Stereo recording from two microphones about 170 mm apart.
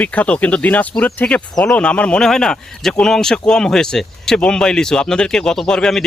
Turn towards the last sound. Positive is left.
turn(degrees=5)  # may be behind; listen again after turning